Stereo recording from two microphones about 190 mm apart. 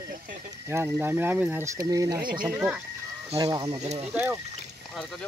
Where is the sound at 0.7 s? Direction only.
10° right (ahead or behind).